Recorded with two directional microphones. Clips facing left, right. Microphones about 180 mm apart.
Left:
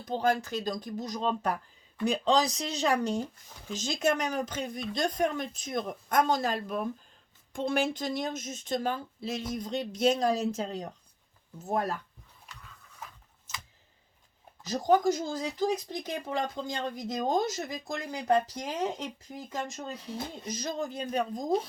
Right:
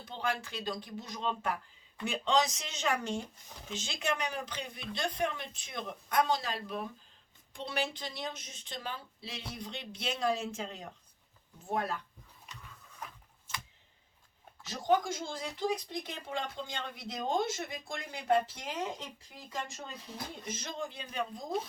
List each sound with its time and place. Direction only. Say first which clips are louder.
0.0 s a woman's voice: left 8 dB; 40° left (ahead or behind)
14.6 s a woman's voice: left 5 dB; 40° left (ahead or behind)